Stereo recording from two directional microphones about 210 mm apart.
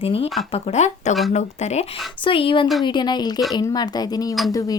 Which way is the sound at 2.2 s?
25° left (ahead or behind).